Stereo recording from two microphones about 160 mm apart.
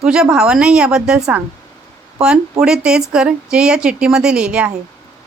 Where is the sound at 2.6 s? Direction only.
5° right (ahead or behind).